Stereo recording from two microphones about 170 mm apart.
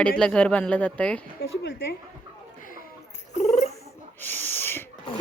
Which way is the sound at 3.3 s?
45° left (ahead or behind).